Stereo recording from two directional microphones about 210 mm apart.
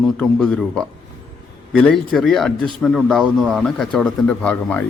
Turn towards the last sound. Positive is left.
turn(degrees=5)  # may be behind; listen again after turning